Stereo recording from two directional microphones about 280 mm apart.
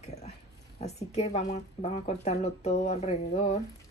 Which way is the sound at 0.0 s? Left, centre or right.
Left.